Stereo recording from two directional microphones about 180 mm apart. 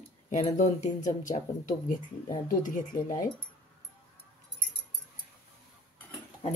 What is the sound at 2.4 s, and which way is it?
Speech, 50° left (ahead or behind).